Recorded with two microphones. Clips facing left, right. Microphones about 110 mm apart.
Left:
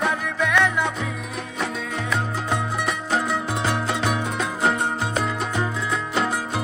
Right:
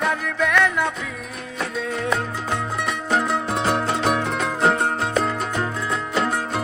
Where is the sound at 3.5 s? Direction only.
60° right (ahead or behind).